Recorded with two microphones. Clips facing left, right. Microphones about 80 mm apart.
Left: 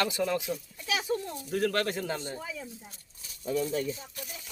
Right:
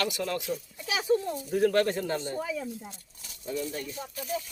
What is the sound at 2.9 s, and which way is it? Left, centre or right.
Speech, right.